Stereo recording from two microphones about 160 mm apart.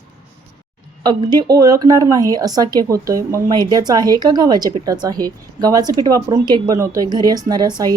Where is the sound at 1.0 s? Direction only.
25° right (ahead or behind).